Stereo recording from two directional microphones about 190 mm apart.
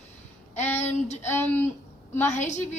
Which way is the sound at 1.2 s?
10° left (ahead or behind).